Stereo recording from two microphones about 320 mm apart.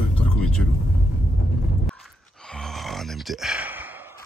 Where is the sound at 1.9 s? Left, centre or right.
Centre.